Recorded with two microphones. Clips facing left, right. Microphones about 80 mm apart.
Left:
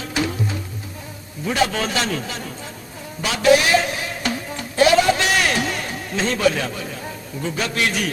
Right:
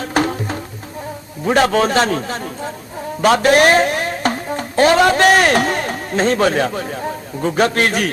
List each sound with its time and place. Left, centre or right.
0.0 s music: right
1.5 s a man's voice: right